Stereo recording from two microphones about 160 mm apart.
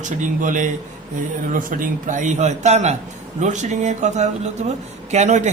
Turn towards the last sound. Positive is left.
turn(degrees=-50)  # may be behind; listen again after turning